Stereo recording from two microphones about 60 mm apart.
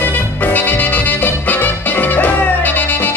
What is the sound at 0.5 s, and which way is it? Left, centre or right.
Music, left.